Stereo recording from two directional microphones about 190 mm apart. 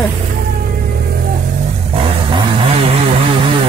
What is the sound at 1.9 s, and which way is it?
Chainsaw, 30° right (ahead or behind).